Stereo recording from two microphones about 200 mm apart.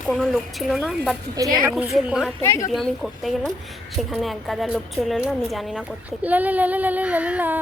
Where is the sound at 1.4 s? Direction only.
20° right (ahead or behind).